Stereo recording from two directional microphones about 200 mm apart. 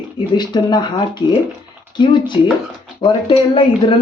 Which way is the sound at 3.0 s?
25° left (ahead or behind).